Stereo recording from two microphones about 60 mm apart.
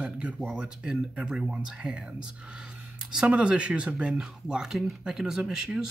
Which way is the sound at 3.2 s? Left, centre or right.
Right.